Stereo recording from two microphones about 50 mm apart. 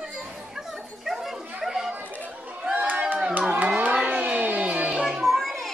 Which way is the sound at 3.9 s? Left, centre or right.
Right.